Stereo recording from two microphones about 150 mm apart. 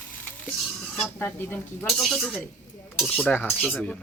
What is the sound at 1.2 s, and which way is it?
Speech, 15° left (ahead or behind).